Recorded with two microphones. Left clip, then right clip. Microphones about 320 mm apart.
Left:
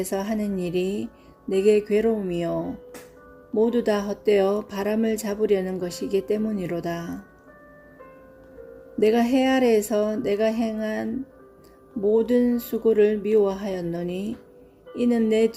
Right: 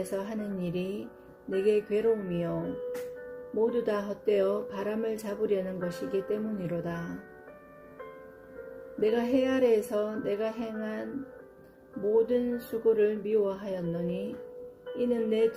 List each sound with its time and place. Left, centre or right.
0.0 s speech: left
3.7 s speech: left
9.0 s speech: left
12.1 s speech: left